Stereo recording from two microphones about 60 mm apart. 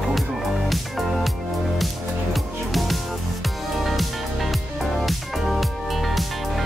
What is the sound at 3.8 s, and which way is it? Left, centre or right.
Music, centre.